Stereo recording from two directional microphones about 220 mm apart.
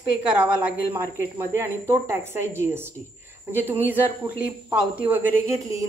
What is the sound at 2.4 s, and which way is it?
A woman's voice, 10° right (ahead or behind).